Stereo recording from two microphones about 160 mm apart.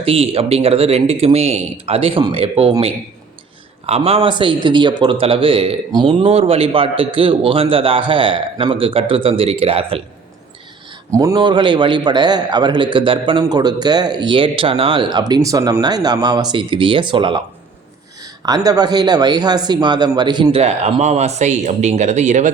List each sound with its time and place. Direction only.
0.0 s speech: 35° right (ahead or behind)
3.8 s speech: 40° right (ahead or behind)
11.2 s a man's voice: 25° right (ahead or behind)
20.6 s speech: 40° right (ahead or behind)